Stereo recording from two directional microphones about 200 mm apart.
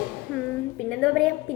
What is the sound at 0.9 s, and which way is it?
Speech, centre (ahead or behind).